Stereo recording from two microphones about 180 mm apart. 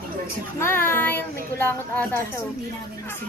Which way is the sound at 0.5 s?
10° left (ahead or behind).